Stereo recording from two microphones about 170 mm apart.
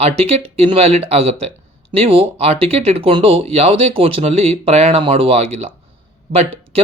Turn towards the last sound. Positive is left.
turn(degrees=-35)  # may be behind; listen again after turning